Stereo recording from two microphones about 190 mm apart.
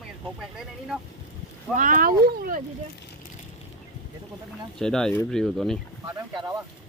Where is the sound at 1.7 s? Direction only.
45° right (ahead or behind).